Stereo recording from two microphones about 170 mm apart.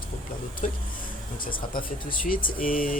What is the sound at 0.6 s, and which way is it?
Speech, 45° left (ahead or behind).